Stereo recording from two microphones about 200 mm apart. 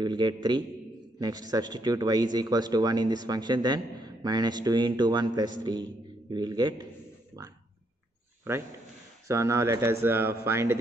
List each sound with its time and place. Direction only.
0.0 s a man's voice: 20° right (ahead or behind)
7.4 s a sound: 15° right (ahead or behind)
9.3 s speech: 15° right (ahead or behind)